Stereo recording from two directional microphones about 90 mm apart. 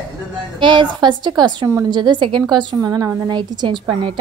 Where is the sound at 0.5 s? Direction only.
65° right (ahead or behind).